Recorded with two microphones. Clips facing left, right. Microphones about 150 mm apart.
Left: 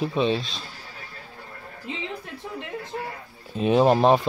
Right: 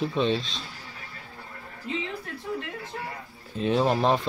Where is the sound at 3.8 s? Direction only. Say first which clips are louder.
Left 6 dB; 30° left (ahead or behind).